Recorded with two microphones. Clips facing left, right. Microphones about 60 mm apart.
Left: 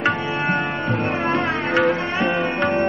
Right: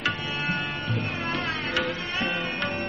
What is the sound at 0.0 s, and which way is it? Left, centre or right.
Music, left.